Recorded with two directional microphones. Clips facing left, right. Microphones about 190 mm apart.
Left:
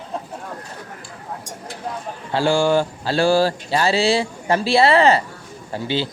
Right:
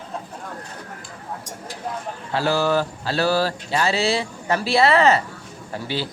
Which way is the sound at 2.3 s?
30° left (ahead or behind).